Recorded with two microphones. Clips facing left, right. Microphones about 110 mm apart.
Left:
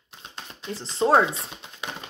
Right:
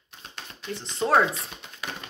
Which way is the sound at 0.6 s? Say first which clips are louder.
Left 4 dB; 30° left (ahead or behind).